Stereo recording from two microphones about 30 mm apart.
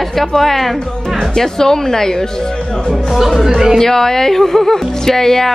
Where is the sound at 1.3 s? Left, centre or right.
Centre.